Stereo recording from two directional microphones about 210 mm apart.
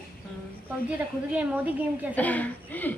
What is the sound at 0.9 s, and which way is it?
A woman's voice, 5° right (ahead or behind).